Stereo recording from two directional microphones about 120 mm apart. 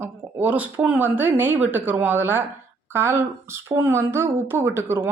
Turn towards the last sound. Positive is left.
turn(degrees=-20)  # may be behind; listen again after turning